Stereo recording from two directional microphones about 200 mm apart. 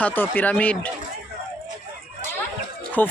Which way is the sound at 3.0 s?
10° left (ahead or behind).